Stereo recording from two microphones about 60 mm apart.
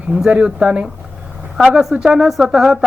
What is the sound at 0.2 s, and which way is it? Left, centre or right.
Speech, centre.